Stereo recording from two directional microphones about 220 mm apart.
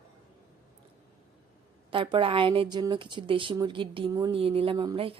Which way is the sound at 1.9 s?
20° right (ahead or behind).